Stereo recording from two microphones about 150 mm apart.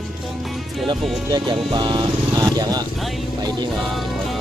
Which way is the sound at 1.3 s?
25° right (ahead or behind).